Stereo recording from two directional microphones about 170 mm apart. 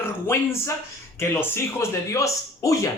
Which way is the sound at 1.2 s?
15° left (ahead or behind).